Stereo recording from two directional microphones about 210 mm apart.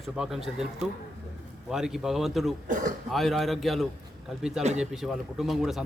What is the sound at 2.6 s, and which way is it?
Speech, 35° right (ahead or behind).